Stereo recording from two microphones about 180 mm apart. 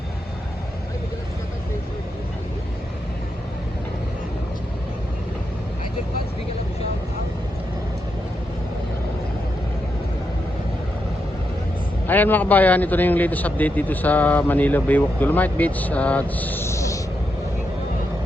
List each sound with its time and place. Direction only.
12.0 s a man's voice: 10° left (ahead or behind)